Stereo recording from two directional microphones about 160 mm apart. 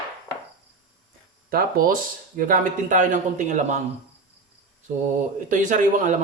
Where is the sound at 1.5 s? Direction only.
65° right (ahead or behind); by 3.8 s 50° right (ahead or behind).